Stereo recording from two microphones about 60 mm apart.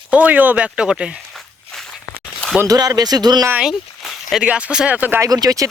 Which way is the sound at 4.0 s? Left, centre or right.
Centre.